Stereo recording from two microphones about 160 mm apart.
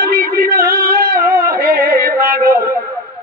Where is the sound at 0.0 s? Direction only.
65° right (ahead or behind).